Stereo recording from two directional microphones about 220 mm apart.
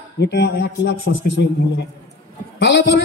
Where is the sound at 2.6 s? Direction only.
50° left (ahead or behind).